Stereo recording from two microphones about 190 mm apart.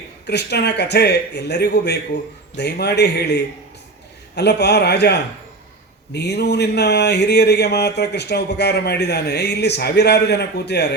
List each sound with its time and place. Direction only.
0.3 s speech: 60° left (ahead or behind)